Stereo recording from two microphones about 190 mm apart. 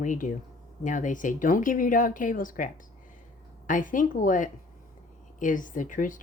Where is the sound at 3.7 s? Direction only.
45° left (ahead or behind).